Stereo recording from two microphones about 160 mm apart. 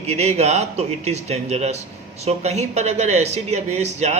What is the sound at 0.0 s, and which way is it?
Speech, 45° right (ahead or behind).